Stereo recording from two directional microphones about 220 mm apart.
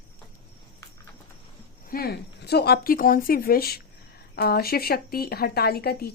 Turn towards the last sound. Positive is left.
turn(degrees=45)  # may be behind; listen again after turning